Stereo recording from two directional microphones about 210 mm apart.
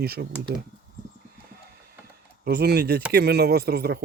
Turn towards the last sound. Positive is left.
turn(degrees=-50)  # may be behind; listen again after turning